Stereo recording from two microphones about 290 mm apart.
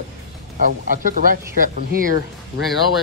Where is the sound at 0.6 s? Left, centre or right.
Right.